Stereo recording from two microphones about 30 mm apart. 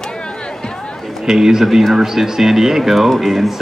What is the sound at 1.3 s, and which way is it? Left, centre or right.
Speech, centre.